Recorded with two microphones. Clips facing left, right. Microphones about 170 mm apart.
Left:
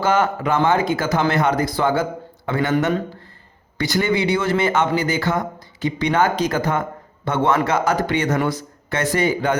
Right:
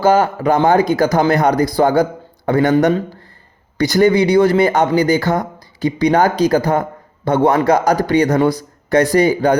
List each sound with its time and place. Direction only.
0.0 s speech: 35° right (ahead or behind)